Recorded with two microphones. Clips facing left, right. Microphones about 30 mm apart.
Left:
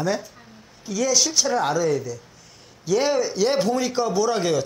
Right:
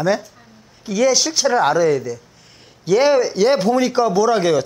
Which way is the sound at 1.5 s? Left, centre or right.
Right.